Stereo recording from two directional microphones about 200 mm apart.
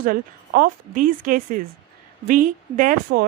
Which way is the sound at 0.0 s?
45° right (ahead or behind).